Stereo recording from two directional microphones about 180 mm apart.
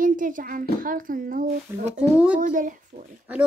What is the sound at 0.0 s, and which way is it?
A child's voice, 45° right (ahead or behind).